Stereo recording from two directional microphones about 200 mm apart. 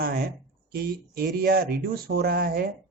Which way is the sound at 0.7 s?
50° right (ahead or behind).